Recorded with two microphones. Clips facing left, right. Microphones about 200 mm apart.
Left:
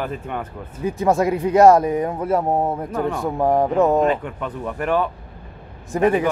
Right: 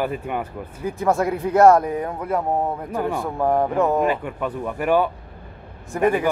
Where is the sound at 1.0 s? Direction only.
20° left (ahead or behind).